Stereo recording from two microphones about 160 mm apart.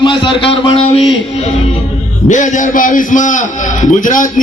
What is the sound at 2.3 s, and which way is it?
A man's voice, 50° left (ahead or behind).